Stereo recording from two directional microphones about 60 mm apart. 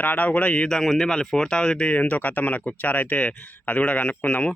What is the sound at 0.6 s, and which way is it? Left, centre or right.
Speech, centre.